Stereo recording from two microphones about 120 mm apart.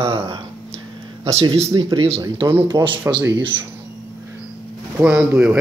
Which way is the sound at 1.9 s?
55° right (ahead or behind).